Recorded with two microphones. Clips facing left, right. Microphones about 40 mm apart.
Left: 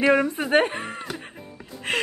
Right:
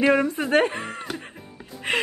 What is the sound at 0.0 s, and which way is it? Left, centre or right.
Speech, centre.